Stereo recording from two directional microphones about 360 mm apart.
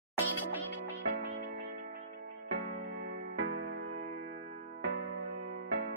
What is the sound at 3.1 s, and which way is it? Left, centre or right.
Music, right.